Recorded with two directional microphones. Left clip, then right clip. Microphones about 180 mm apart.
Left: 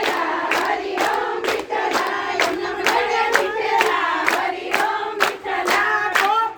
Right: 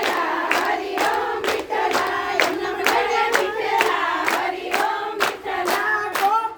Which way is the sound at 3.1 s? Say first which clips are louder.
Left 1 dB; 65° right (ahead or behind).